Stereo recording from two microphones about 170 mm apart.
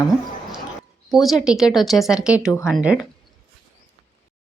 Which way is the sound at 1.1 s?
Centre (ahead or behind).